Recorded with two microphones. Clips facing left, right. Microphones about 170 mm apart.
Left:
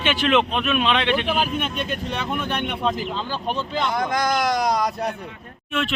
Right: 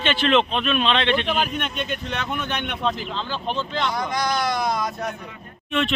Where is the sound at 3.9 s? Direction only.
50° left (ahead or behind); by 5.2 s 35° left (ahead or behind).